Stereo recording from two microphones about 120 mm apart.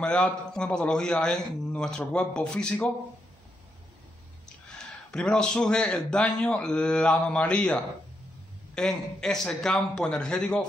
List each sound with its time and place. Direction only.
0.0 s a man's voice: 10° left (ahead or behind)
4.7 s a man's voice: 5° left (ahead or behind)